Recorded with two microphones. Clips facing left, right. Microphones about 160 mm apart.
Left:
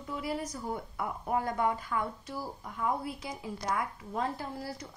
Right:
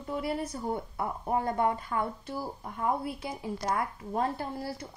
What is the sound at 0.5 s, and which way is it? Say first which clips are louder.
Speech: right 3 dB; 30° right (ahead or behind).